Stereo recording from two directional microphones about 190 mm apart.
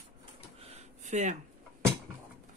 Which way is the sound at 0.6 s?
35° right (ahead or behind).